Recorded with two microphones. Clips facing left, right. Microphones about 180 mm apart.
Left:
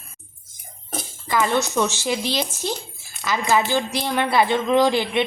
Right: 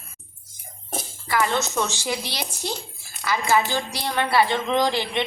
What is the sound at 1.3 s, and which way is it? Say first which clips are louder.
A woman's voice: left 2 dB; 15° left (ahead or behind).